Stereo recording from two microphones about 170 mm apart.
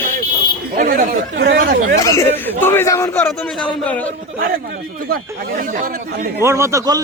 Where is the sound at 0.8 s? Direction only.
50° right (ahead or behind).